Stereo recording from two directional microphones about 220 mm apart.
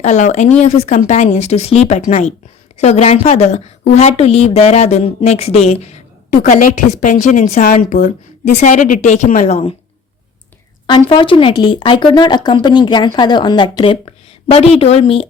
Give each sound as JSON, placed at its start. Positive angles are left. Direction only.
{"t": 0.0, "sound": "a woman's voice", "side_deg": 30}
{"t": 11.1, "sound": "a woman's voice", "side_deg": 25}